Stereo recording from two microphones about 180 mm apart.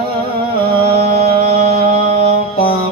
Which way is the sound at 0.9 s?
35° right (ahead or behind).